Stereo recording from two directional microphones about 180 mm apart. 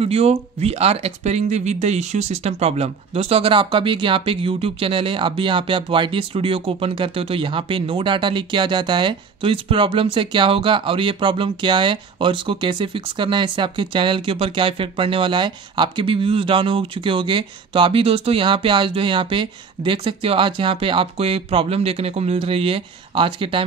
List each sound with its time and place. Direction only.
0.0 s speech: 35° right (ahead or behind)